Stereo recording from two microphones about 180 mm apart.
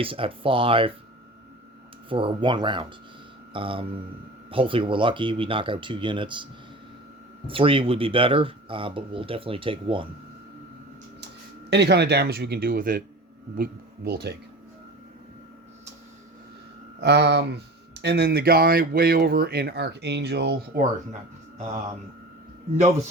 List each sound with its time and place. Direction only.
0.0 s speech: 30° right (ahead or behind)
2.0 s speech: 30° right (ahead or behind)
11.7 s speech: 70° right (ahead or behind)
17.0 s speech: 70° right (ahead or behind)